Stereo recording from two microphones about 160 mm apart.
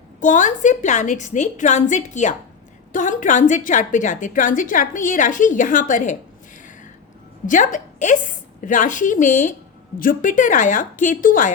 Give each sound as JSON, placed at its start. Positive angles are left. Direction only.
{"t": 0.2, "sound": "a woman's voice", "side_deg": 50}
{"t": 7.4, "sound": "a woman's voice", "side_deg": 50}